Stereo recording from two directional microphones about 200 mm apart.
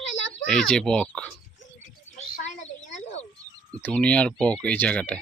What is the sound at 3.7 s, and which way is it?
Speech, 5° left (ahead or behind).